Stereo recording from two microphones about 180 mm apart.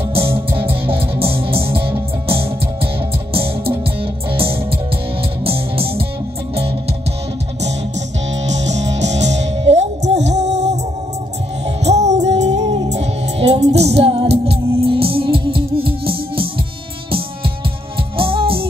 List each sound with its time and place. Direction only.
0.2 s music: 15° right (ahead or behind)
0.8 s music: 30° right (ahead or behind)
9.2 s music: 40° right (ahead or behind)
11.8 s music: 40° right (ahead or behind)
18.1 s music: 30° right (ahead or behind)